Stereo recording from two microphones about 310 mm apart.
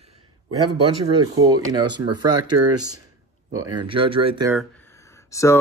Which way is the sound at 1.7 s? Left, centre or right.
Centre.